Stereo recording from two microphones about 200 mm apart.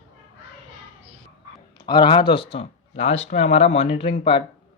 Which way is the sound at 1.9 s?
25° left (ahead or behind).